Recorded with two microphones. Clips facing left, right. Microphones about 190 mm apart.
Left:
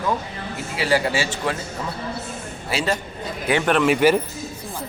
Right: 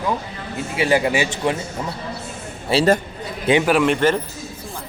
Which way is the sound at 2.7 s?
30° right (ahead or behind).